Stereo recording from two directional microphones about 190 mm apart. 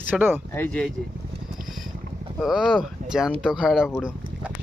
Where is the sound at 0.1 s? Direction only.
10° right (ahead or behind).